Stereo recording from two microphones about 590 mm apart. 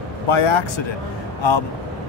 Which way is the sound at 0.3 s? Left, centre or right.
Left.